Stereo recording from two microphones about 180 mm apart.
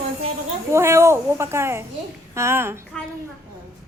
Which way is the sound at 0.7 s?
15° right (ahead or behind).